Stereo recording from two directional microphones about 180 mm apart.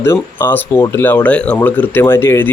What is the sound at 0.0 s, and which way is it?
Speech, 10° left (ahead or behind).